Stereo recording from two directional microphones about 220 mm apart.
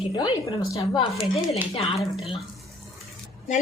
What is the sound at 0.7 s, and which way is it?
Speech, 25° left (ahead or behind).